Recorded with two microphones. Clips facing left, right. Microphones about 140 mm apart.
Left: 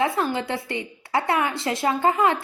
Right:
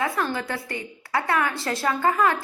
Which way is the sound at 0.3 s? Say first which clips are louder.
Left 3 dB; 25° left (ahead or behind).